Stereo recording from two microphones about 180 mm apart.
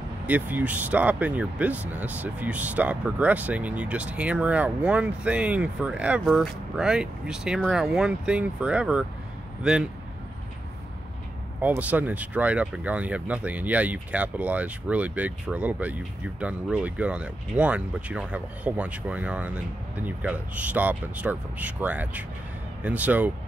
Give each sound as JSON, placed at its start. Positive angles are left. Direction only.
{"t": 0.3, "sound": "speech", "side_deg": -10}
{"t": 11.6, "sound": "speech", "side_deg": -10}